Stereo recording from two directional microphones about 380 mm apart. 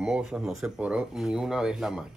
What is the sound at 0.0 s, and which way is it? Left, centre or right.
Speech, centre.